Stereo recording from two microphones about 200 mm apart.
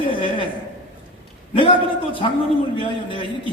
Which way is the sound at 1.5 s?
25° left (ahead or behind).